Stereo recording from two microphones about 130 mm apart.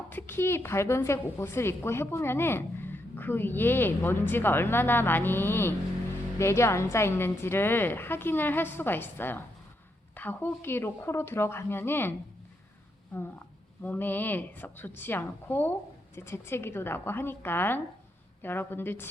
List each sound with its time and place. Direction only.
0.1 s a woman's voice: 15° left (ahead or behind)
13.8 s a woman's voice: 15° left (ahead or behind)